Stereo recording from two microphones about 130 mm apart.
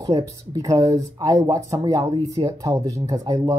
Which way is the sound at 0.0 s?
25° right (ahead or behind).